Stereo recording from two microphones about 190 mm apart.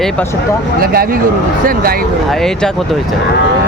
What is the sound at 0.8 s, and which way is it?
Speech, 50° right (ahead or behind).